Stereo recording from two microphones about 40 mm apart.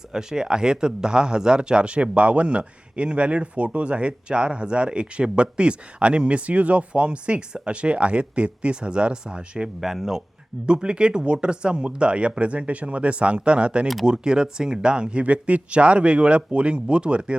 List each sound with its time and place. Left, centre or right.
0.1 s speech: centre
9.8 s speech: centre
10.8 s speech: right